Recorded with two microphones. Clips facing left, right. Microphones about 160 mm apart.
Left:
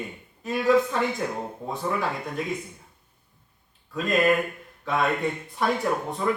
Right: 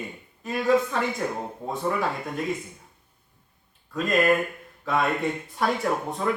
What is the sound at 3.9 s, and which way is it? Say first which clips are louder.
Speech: even; centre (ahead or behind).